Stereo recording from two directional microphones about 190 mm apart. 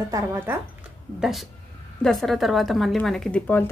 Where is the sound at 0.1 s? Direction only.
10° right (ahead or behind).